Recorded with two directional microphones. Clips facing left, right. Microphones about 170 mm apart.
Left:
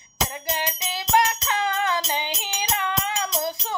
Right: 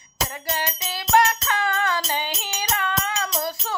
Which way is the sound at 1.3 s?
15° left (ahead or behind).